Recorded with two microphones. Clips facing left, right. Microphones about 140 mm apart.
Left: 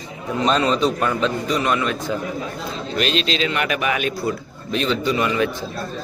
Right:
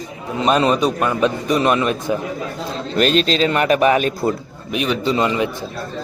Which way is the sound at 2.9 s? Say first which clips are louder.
Right 6 dB; 45° right (ahead or behind).